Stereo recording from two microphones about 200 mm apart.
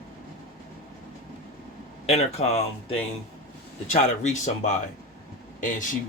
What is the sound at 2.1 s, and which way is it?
Speech, 30° left (ahead or behind).